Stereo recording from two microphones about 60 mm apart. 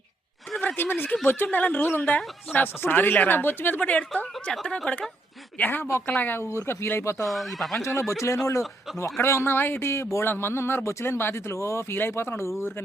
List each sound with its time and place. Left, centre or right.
0.8 s speech: left
2.0 s speech: centre
2.5 s speech: left
6.7 s a man's voice: left
7.3 s speech: centre
7.8 s a man's voice: left
10.2 s a man's voice: left